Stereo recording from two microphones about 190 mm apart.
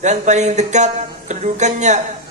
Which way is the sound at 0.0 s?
40° right (ahead or behind).